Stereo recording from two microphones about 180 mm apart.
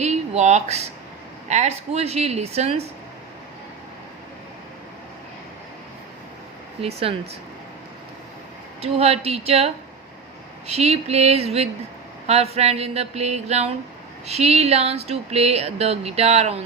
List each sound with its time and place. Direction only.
0.0 s speech: 40° right (ahead or behind)
6.8 s speech: 35° right (ahead or behind)
8.8 s speech: 35° right (ahead or behind)